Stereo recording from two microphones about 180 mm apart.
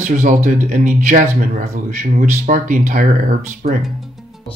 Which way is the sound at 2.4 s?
45° right (ahead or behind).